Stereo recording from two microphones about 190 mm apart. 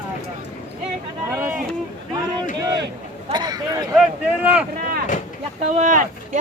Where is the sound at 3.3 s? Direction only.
20° right (ahead or behind).